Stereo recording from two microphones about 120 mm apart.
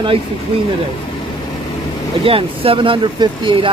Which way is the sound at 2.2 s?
50° right (ahead or behind).